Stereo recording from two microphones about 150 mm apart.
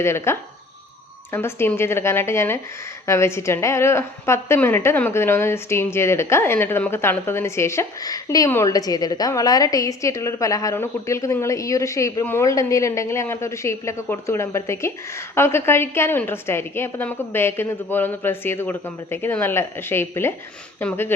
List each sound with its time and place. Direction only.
0.0 s a woman's voice: 15° left (ahead or behind)